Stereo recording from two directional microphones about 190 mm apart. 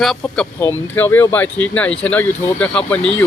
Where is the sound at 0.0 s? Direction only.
Centre (ahead or behind).